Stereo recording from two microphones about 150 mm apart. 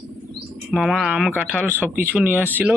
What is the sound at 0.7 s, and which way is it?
Speech, centre (ahead or behind).